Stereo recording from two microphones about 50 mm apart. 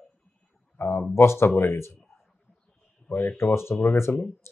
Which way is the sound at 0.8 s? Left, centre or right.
Left.